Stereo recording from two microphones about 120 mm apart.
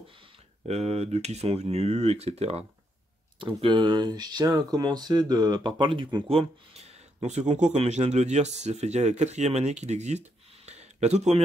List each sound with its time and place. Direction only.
0.7 s speech: 60° right (ahead or behind)
3.3 s speech: 45° right (ahead or behind)
6.2 s speech: 55° right (ahead or behind)